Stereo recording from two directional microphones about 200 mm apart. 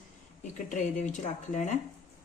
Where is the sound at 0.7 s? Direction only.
35° left (ahead or behind).